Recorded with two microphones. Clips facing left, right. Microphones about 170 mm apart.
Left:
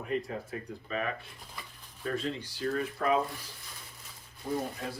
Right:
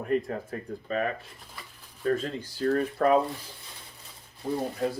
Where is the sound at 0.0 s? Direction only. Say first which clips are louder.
Right 6 dB; 50° right (ahead or behind).